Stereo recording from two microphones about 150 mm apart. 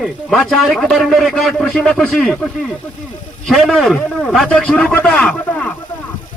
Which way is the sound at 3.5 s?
Centre (ahead or behind).